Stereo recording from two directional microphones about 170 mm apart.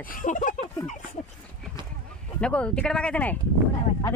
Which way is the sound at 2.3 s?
5° left (ahead or behind).